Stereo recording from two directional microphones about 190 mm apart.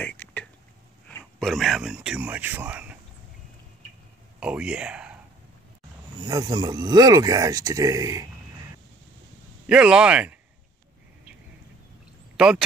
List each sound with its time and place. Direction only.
0.0 s a sound: 5° left (ahead or behind)
1.0 s speech: 5° left (ahead or behind)
4.4 s speech: 5° right (ahead or behind)
6.2 s speech: 20° right (ahead or behind)
9.7 s speech: 5° right (ahead or behind)
12.4 s speech: 5° right (ahead or behind)